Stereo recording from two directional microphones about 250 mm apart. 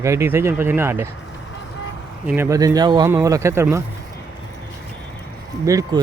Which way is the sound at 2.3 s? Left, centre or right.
Centre.